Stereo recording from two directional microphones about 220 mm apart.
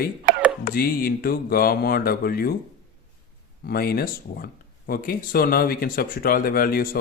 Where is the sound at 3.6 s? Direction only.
45° left (ahead or behind).